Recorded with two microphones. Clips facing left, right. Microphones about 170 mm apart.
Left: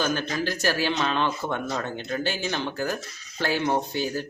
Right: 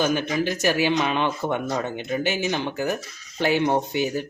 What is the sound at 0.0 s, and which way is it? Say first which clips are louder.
Speech: right 4 dB; 15° right (ahead or behind).